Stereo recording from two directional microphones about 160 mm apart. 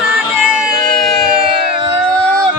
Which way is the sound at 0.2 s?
5° right (ahead or behind).